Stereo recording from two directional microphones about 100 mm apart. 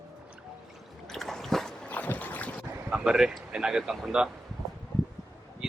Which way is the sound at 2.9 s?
10° right (ahead or behind).